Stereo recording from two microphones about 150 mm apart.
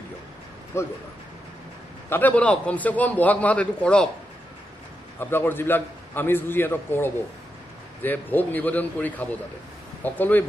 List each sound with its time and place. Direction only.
0.7 s speech: 20° left (ahead or behind)
2.0 s a man's voice: 10° left (ahead or behind)
5.2 s a man's voice: 15° left (ahead or behind)